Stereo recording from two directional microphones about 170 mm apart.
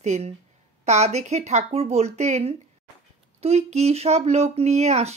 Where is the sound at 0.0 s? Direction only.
40° right (ahead or behind).